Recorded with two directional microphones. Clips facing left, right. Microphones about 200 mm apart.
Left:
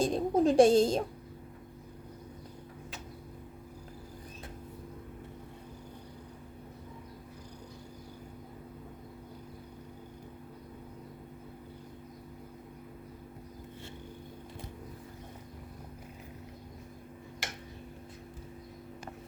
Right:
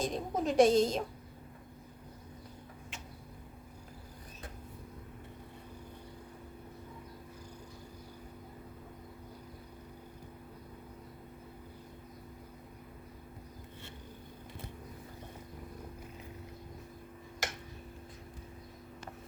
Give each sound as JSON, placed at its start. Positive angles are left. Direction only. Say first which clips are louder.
{"t": 0.0, "sound": "a woman's voice", "louder": "left 7 dB", "side_deg": 30}